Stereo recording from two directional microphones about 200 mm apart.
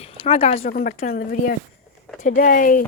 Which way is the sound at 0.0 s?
30° left (ahead or behind).